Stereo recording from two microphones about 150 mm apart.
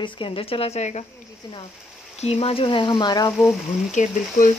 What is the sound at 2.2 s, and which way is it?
Speech, 45° left (ahead or behind).